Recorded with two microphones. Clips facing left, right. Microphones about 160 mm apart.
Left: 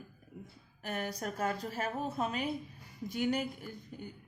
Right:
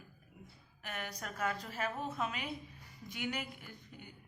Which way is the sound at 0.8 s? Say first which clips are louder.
Left 7 dB; 40° left (ahead or behind).